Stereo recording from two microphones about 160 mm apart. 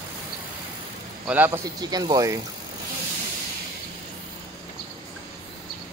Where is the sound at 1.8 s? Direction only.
25° right (ahead or behind).